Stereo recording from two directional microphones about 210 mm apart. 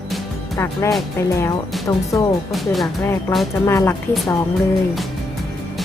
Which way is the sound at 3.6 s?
15° left (ahead or behind).